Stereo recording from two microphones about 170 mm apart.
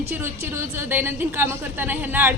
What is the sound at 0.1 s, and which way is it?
A woman's voice, 15° right (ahead or behind).